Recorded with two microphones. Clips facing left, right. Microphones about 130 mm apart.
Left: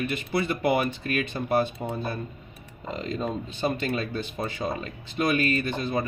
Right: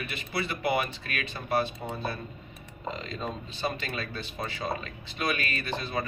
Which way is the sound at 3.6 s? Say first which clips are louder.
Left 6 dB; 45° left (ahead or behind).